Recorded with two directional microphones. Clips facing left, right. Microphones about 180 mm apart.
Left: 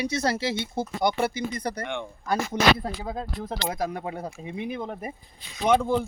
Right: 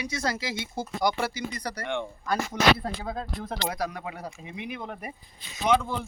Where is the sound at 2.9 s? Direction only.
15° left (ahead or behind).